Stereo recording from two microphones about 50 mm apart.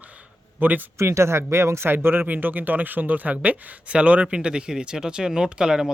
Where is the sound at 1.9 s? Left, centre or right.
Right.